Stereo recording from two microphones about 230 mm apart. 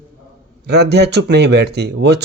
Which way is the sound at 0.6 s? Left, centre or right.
Right.